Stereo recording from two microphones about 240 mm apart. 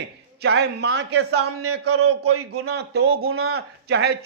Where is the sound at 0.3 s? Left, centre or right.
Right.